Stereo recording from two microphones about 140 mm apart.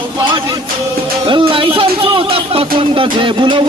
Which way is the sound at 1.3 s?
35° right (ahead or behind).